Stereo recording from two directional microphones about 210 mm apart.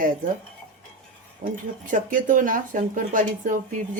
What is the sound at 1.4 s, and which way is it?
Speech, 40° right (ahead or behind).